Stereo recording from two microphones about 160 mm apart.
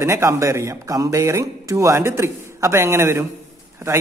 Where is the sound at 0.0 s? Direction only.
15° right (ahead or behind).